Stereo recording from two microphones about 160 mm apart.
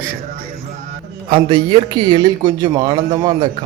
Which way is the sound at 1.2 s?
30° right (ahead or behind).